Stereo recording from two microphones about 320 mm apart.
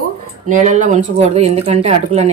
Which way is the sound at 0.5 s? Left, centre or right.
Right.